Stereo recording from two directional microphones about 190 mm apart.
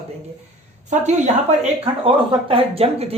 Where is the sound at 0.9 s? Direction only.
40° right (ahead or behind).